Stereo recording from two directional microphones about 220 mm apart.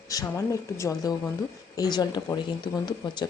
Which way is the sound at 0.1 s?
15° left (ahead or behind).